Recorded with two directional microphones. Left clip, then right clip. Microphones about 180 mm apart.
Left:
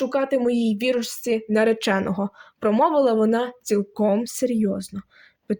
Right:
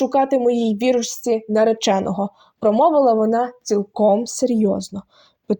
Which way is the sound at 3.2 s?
Centre (ahead or behind).